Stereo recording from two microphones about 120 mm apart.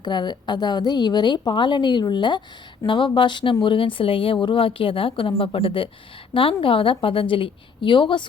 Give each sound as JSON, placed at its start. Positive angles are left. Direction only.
{"t": 0.0, "sound": "a woman's voice", "side_deg": 40}